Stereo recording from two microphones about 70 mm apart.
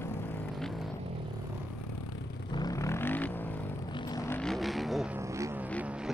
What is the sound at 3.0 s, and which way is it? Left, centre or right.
Vehicle, left.